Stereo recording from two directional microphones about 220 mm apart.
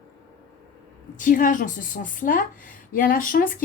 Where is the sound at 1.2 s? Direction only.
35° left (ahead or behind).